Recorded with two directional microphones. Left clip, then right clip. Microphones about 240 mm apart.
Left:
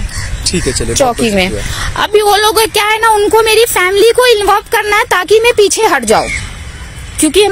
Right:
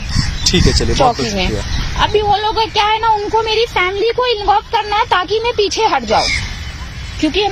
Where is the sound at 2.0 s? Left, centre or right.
Left.